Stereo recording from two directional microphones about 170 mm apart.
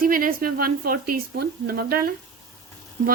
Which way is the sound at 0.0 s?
55° right (ahead or behind).